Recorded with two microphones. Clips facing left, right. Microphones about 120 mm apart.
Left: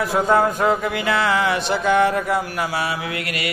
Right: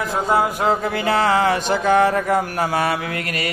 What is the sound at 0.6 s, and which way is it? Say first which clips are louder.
Mantra: even; 35° right (ahead or behind).